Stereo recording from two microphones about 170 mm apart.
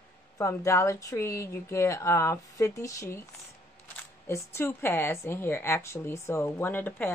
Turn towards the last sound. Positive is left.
turn(degrees=10)  # may be behind; listen again after turning